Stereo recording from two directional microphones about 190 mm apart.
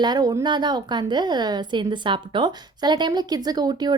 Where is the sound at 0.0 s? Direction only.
20° right (ahead or behind).